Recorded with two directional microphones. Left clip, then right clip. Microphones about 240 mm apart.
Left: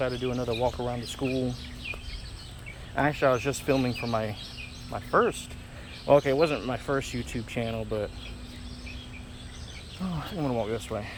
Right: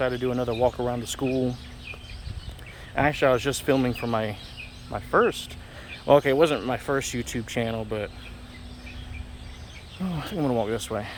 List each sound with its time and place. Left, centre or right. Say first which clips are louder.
0.0 s speech: right 4 dB; centre
0.6 s speech: right 6 dB; right
1.1 s speech: right 3 dB; right
2.9 s speech: right 3 dB; right
10.0 s speech: right 4 dB; right